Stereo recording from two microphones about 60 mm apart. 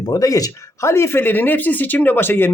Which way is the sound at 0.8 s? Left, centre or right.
Left.